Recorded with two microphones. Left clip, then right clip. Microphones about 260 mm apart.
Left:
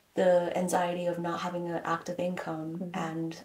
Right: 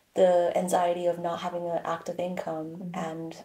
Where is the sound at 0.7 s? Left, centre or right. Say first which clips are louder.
Right 4 dB; right.